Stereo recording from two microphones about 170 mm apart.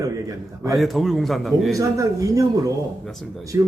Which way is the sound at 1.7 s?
20° right (ahead or behind).